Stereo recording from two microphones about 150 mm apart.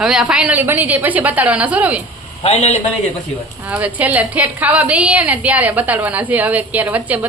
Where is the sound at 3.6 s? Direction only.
10° right (ahead or behind).